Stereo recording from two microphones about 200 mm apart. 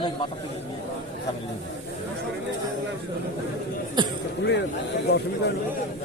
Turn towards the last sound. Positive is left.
turn(degrees=55)  # may be behind; listen again after turning